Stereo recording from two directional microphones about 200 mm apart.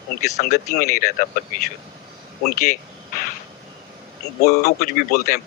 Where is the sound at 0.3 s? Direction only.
45° left (ahead or behind).